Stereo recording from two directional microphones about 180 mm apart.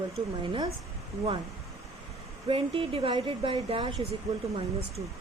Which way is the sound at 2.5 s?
30° right (ahead or behind).